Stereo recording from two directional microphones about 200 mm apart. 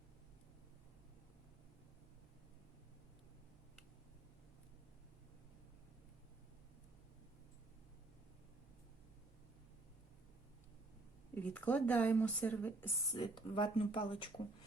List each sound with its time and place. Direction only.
11.3 s speech: 10° left (ahead or behind); by 14.4 s 25° left (ahead or behind)